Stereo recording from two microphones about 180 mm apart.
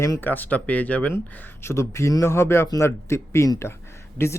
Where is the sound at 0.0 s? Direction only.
15° left (ahead or behind).